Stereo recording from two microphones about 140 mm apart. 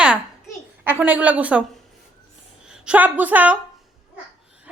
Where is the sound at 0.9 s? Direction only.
10° right (ahead or behind).